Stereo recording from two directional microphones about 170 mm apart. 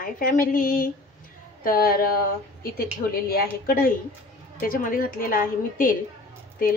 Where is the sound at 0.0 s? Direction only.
55° left (ahead or behind).